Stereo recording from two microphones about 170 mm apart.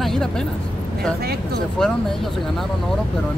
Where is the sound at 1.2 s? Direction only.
65° right (ahead or behind).